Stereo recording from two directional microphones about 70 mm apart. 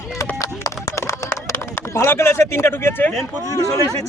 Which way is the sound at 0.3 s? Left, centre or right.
Left.